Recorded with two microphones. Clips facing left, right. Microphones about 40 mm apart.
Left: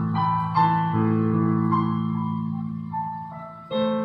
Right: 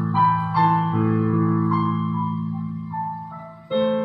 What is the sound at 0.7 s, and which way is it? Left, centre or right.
Music, centre.